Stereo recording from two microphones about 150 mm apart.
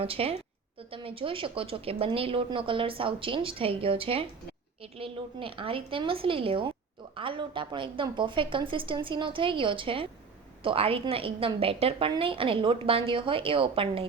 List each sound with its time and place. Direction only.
0.0 s a woman's voice: 40° right (ahead or behind)